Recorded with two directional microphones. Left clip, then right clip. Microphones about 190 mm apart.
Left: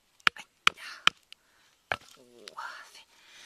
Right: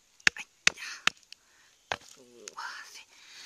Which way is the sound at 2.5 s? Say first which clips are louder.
Right 1 dB; 35° left (ahead or behind).